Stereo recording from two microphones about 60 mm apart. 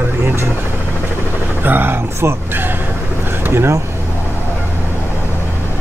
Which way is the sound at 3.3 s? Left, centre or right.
Right.